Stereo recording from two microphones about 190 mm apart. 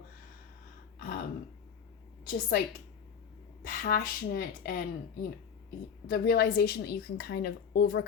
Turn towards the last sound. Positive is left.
turn(degrees=55)  # may be behind; listen again after turning